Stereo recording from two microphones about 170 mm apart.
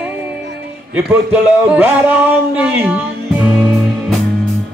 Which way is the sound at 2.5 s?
10° right (ahead or behind).